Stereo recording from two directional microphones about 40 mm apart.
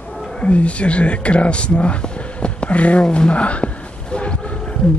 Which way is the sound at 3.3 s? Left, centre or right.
Left.